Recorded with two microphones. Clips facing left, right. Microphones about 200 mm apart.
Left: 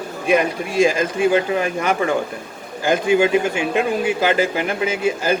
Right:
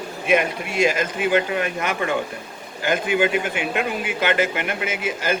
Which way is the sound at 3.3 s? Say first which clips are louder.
Left 5 dB; 30° left (ahead or behind).